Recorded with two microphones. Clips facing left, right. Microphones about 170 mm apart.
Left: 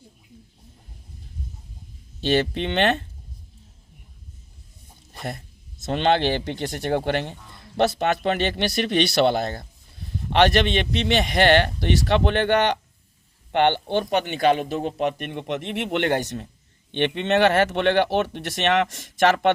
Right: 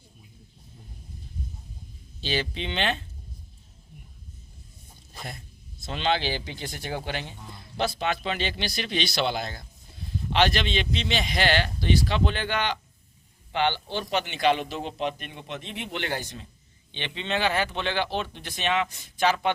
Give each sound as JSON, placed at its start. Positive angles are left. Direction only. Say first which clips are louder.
{"t": 2.2, "sound": "a man's voice", "louder": "left 8 dB", "side_deg": 60}
{"t": 5.8, "sound": "a man's voice", "louder": "left 6 dB", "side_deg": 60}